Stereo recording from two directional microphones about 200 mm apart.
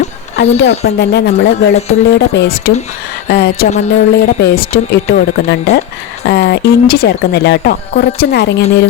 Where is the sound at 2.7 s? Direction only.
35° left (ahead or behind); by 8.6 s 55° left (ahead or behind).